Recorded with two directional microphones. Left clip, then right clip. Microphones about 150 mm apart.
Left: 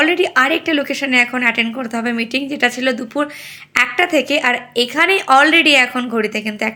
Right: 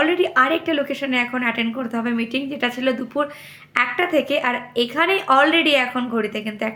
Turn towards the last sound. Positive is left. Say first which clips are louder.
# left 5 dB
turn(degrees=25)  # may be behind; listen again after turning